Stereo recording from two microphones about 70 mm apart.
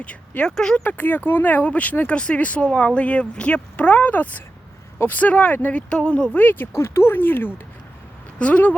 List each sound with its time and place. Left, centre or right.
0.0 s speech: centre
0.9 s speech: left
6.4 s speech: left
6.7 s speech: left
8.4 s speech: centre